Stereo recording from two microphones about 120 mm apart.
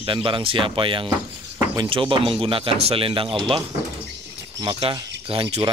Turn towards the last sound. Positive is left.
turn(degrees=-45)  # may be behind; listen again after turning